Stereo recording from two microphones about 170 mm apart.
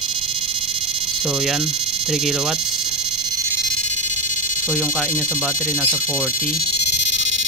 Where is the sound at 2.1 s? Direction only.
5° right (ahead or behind).